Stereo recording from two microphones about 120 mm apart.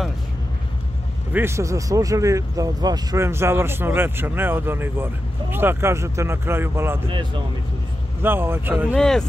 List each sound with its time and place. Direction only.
1.3 s speech: 20° right (ahead or behind)
3.2 s speech: 20° right (ahead or behind)
7.1 s speech: 45° right (ahead or behind)
8.2 s speech: 20° right (ahead or behind)
8.9 s speech: 5° left (ahead or behind)